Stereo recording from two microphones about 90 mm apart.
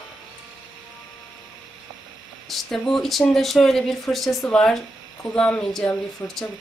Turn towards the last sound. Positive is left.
turn(degrees=30)  # may be behind; listen again after turning